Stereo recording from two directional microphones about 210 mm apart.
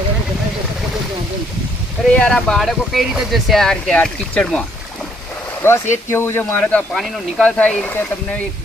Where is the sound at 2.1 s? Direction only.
5° left (ahead or behind).